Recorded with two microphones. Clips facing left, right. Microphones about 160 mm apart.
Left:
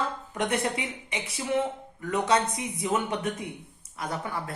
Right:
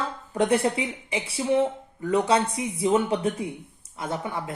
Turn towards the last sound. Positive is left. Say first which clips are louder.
# right 3 dB
turn(degrees=-20)  # may be behind; listen again after turning